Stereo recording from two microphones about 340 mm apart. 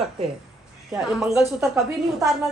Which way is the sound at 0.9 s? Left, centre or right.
Centre.